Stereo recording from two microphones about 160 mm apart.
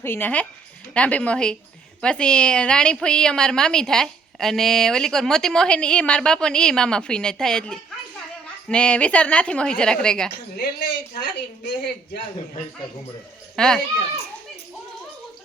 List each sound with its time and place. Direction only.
0.0 s a woman's voice: 15° left (ahead or behind)
10.6 s speech: 90° left
13.6 s a woman's voice: 5° left (ahead or behind)